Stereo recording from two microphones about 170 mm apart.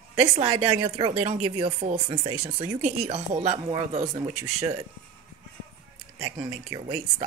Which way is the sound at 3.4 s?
35° right (ahead or behind).